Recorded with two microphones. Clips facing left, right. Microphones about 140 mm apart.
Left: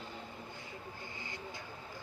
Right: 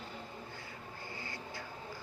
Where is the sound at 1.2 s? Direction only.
20° left (ahead or behind).